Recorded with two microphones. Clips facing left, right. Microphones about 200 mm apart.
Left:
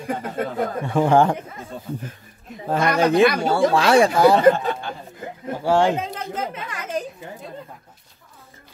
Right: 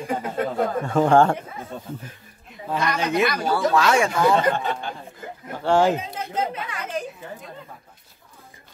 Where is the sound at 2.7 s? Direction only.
50° left (ahead or behind).